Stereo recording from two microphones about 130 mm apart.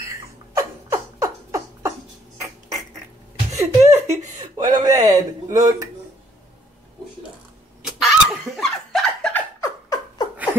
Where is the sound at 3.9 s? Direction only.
60° right (ahead or behind).